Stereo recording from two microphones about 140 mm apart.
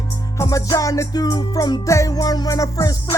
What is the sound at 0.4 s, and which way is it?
Music, 25° left (ahead or behind).